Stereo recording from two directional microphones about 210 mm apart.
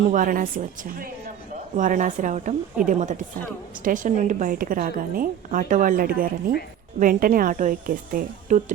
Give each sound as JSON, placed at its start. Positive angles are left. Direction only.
{"t": 0.1, "sound": "a woman's voice", "side_deg": -40}